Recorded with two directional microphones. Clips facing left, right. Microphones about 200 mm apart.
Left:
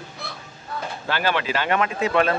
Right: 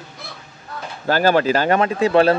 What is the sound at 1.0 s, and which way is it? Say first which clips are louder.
Speech: right 9 dB; 40° right (ahead or behind).